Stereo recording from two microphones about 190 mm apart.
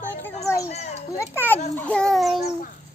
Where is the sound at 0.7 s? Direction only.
35° left (ahead or behind).